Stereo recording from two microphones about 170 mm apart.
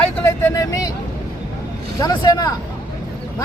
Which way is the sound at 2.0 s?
25° left (ahead or behind).